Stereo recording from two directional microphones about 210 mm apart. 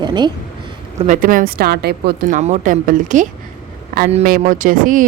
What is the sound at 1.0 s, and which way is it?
A woman's voice, 40° right (ahead or behind).